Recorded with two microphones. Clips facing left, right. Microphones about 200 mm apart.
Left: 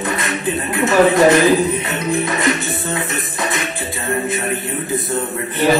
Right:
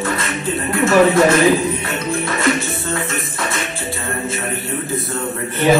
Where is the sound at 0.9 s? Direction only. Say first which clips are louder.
Left 1 dB; 20° left (ahead or behind).